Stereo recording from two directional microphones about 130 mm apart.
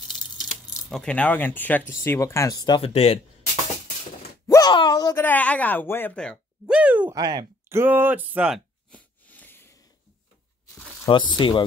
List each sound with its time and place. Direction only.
0.1 s speech: centre (ahead or behind); by 2.8 s 30° left (ahead or behind)
2.8 s speech: 50° left (ahead or behind)
4.5 s a sound: 30° left (ahead or behind)
5.1 s a woman's voice: 15° left (ahead or behind)
6.6 s speech: 10° right (ahead or behind)
7.2 s speech: 35° right (ahead or behind)
7.7 s speech: 15° right (ahead or behind)
8.9 s a sound: 10° left (ahead or behind)
11.1 s speech: 35° left (ahead or behind)